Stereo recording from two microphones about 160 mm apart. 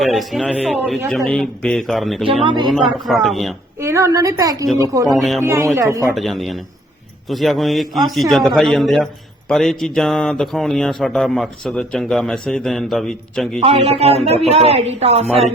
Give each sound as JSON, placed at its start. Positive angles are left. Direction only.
{"t": 0.0, "sound": "speech", "side_deg": 0}
{"t": 2.2, "sound": "speech", "side_deg": -35}
{"t": 2.6, "sound": "speech", "side_deg": 0}
{"t": 3.8, "sound": "a woman's voice", "side_deg": -20}
{"t": 5.1, "sound": "speech", "side_deg": 0}
{"t": 5.4, "sound": "speech", "side_deg": -15}
{"t": 6.1, "sound": "speech", "side_deg": 0}
{"t": 13.6, "sound": "speech", "side_deg": -40}